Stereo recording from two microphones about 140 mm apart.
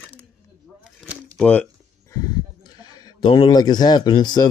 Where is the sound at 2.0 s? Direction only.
25° left (ahead or behind).